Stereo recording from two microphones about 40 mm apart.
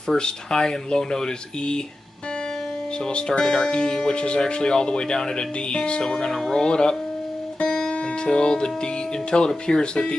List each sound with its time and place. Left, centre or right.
0.1 s speech: centre
3.1 s speech: left
7.6 s music: centre
9.3 s speech: left